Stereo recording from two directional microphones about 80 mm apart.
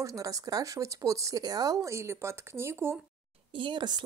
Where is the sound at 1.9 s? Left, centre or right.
Right.